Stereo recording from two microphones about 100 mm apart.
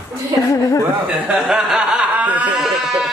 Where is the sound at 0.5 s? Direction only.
30° left (ahead or behind).